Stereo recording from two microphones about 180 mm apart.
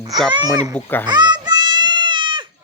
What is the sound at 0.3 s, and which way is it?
Speech, 25° right (ahead or behind).